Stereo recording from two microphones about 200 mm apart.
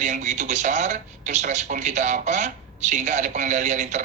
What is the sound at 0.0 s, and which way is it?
A man's voice, 35° right (ahead or behind).